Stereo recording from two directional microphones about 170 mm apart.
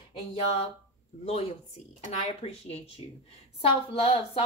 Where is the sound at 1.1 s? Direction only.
40° left (ahead or behind).